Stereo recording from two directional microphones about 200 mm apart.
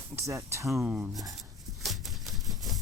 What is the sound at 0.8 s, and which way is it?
Speech, 5° right (ahead or behind).